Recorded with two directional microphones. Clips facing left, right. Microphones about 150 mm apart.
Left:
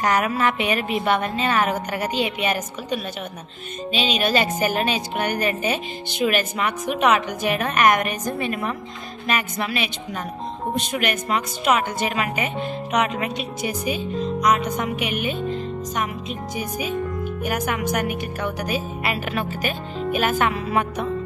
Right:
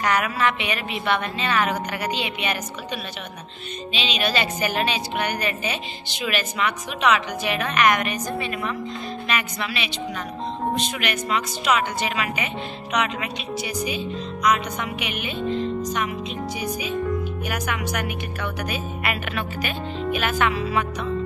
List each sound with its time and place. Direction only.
0.0 s a woman's voice: 40° left (ahead or behind)
17.5 s a woman's voice: 45° left (ahead or behind)